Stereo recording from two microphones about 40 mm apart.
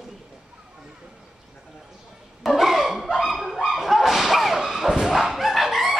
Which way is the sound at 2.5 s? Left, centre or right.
Centre.